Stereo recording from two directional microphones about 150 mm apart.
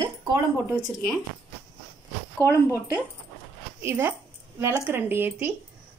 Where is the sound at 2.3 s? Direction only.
15° left (ahead or behind).